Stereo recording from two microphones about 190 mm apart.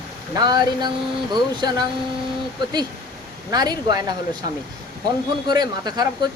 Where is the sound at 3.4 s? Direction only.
20° right (ahead or behind).